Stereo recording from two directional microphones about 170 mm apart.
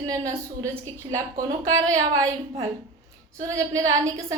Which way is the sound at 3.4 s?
20° right (ahead or behind).